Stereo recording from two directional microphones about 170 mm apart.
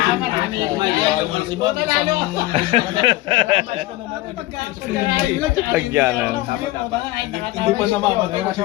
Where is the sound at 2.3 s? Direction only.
30° right (ahead or behind).